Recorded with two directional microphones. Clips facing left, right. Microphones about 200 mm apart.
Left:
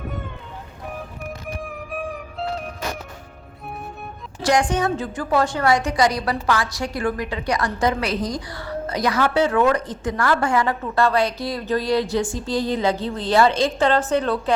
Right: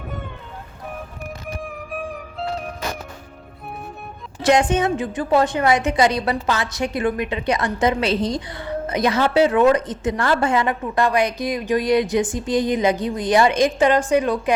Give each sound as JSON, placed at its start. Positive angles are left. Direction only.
{"t": 1.5, "sound": "music", "side_deg": 0}
{"t": 4.4, "sound": "a woman's voice", "side_deg": -20}